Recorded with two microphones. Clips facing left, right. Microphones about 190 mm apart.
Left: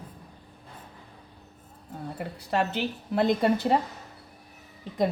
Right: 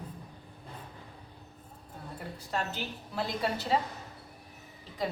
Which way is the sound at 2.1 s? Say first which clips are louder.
Left 7 dB; 70° left (ahead or behind).